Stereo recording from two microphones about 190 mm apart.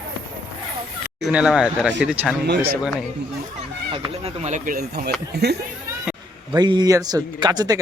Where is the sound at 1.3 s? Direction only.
5° right (ahead or behind).